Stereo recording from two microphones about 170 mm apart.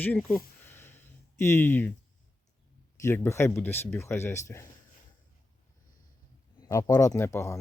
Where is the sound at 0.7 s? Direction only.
10° left (ahead or behind).